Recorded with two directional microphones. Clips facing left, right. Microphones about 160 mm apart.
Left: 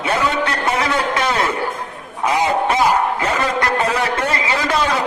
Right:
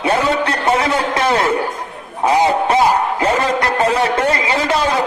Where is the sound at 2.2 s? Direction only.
30° right (ahead or behind).